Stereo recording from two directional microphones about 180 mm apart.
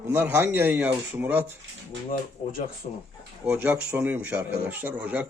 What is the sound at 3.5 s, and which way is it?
Speech, 10° right (ahead or behind).